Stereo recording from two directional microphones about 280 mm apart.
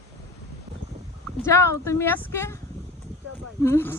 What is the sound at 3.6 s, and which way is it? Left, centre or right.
Speech, centre.